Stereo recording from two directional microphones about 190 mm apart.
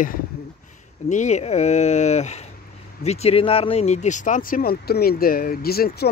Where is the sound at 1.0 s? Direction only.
40° left (ahead or behind).